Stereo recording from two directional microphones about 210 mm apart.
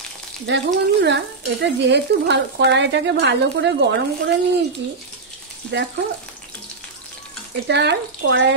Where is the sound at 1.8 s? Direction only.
55° right (ahead or behind).